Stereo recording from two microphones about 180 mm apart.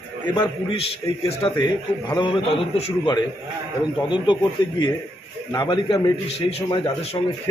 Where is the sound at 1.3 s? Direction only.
30° left (ahead or behind).